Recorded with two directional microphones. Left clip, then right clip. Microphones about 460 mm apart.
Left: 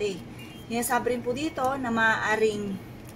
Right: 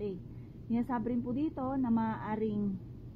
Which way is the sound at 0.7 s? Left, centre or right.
Centre.